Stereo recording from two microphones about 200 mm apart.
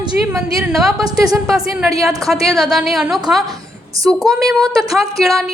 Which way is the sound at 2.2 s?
Centre (ahead or behind).